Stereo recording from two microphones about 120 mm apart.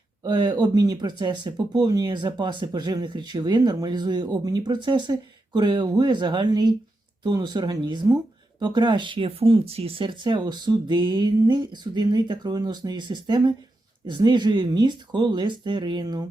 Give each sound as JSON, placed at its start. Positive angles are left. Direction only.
{"t": 0.3, "sound": "speech", "side_deg": -35}